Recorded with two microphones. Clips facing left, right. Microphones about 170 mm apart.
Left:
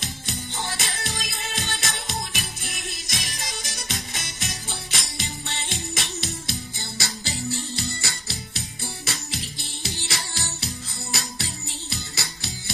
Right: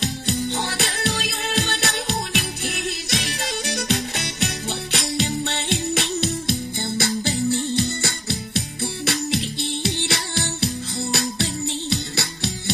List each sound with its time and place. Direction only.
0.0 s music: 65° right (ahead or behind)